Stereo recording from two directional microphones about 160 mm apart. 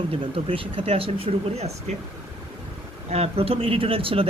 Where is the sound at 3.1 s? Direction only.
40° right (ahead or behind).